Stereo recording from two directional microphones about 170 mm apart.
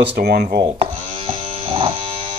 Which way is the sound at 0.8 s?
35° right (ahead or behind).